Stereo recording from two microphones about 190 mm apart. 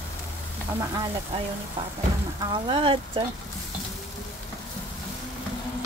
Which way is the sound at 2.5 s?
25° right (ahead or behind).